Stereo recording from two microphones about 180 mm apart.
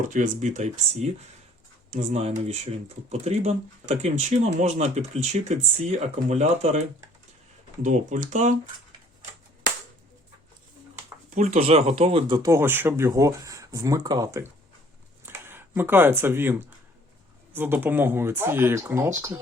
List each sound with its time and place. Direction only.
0.0 s speech: 45° right (ahead or behind)
11.3 s speech: 40° right (ahead or behind)
12.4 s speech: 15° right (ahead or behind)